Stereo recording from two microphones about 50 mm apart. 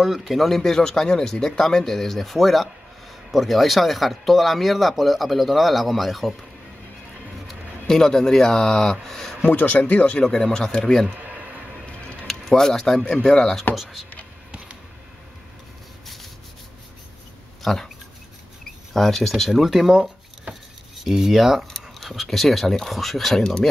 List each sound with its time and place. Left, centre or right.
0.0 s speech: centre
7.8 s speech: centre
9.4 s speech: left
10.1 s speech: centre
12.3 s speech: centre
17.6 s speech: centre
18.9 s speech: centre